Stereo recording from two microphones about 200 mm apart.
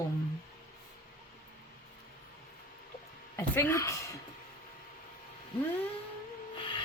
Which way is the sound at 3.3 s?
10° left (ahead or behind).